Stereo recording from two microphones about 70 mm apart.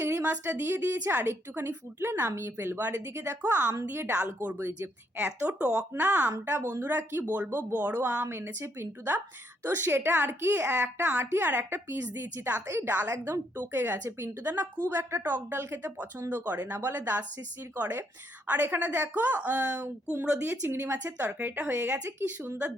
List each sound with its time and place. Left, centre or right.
0.0 s a sound: right
0.5 s a woman's voice: right
2.9 s a woman's voice: right
4.5 s a woman's voice: right; by 5.8 s centre
5.9 s a woman's voice: right
20.1 s a woman's voice: right